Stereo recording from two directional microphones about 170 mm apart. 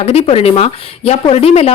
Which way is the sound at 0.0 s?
35° left (ahead or behind).